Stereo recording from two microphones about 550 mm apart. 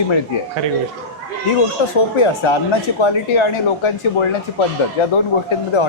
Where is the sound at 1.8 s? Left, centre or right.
Left.